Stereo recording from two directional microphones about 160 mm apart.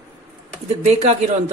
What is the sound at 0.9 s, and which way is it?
Speech, 45° right (ahead or behind).